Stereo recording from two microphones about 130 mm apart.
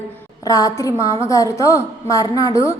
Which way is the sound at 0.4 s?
25° left (ahead or behind).